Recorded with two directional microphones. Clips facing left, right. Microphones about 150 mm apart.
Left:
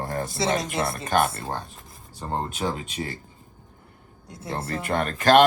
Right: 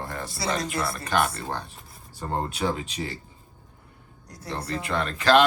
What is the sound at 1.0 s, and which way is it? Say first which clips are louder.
Speech: left 2 dB; 50° left (ahead or behind).